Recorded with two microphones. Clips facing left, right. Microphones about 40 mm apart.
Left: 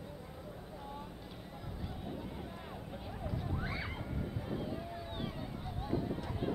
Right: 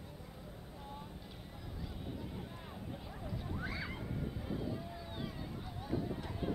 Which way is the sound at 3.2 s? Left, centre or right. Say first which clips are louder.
Left 3 dB; centre.